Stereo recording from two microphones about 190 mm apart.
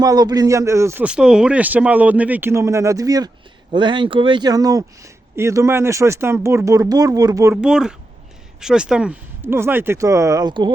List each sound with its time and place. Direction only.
0.0 s speech: 20° right (ahead or behind)
7.5 s speech: 5° right (ahead or behind); by 10.7 s 20° right (ahead or behind)